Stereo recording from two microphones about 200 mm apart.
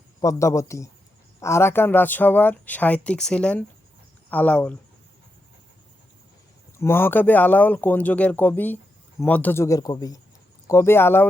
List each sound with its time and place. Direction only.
0.2 s speech: 15° left (ahead or behind)
6.7 s speech: 10° left (ahead or behind)